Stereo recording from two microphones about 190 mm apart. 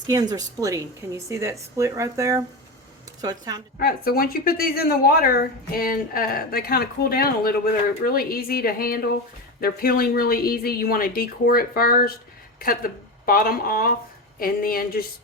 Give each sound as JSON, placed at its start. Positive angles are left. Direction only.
{"t": 0.1, "sound": "a woman's voice", "side_deg": -20}
{"t": 3.8, "sound": "speech", "side_deg": 50}